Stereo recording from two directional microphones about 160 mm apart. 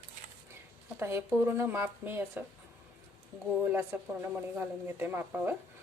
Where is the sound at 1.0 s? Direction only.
15° right (ahead or behind).